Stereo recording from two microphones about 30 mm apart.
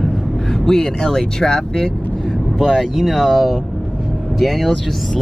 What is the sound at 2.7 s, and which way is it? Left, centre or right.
Speech, centre.